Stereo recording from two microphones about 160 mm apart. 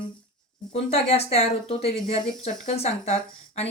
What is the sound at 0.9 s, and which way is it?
Speech, 40° left (ahead or behind).